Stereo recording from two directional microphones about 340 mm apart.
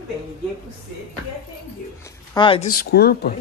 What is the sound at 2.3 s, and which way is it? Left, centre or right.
Speech, centre.